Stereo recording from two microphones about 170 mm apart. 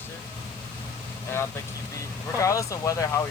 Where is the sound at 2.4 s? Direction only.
20° left (ahead or behind).